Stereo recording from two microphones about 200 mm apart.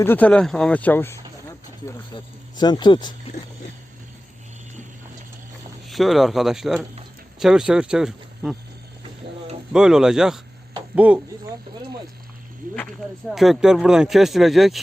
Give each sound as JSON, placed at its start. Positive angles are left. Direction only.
{"t": 0.0, "sound": "speech", "side_deg": 10}
{"t": 5.9, "sound": "speech", "side_deg": 0}
{"t": 9.7, "sound": "speech", "side_deg": -5}
{"t": 12.7, "sound": "speech", "side_deg": 5}